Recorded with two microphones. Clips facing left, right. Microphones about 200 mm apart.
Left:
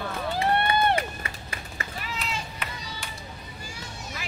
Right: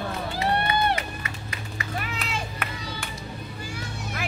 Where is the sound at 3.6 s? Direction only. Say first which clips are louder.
Right 4 dB; 60° right (ahead or behind).